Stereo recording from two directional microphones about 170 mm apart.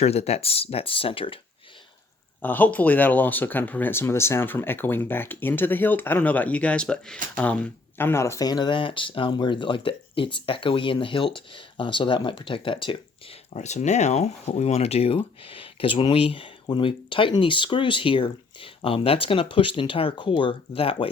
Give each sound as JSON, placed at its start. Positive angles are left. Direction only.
{"t": 0.0, "sound": "speech", "side_deg": 40}
{"t": 2.4, "sound": "speech", "side_deg": 10}
{"t": 13.5, "sound": "speech", "side_deg": 40}